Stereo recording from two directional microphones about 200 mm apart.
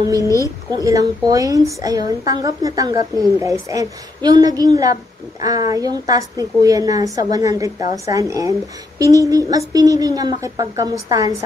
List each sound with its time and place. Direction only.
0.1 s a woman's voice: 15° right (ahead or behind)